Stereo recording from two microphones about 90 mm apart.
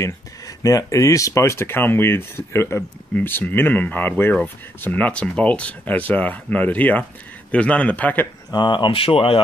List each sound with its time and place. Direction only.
0.0 s speech: 40° left (ahead or behind); by 8.3 s 20° left (ahead or behind)
8.5 s speech: 55° left (ahead or behind); by 9.4 s 90° left